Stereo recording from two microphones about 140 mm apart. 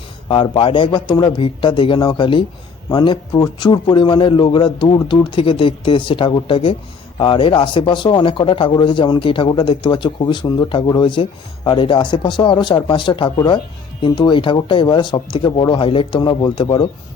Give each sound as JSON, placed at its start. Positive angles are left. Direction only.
{"t": 0.3, "sound": "a man's voice", "side_deg": 40}